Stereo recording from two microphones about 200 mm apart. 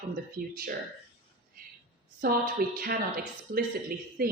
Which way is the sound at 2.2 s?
45° right (ahead or behind).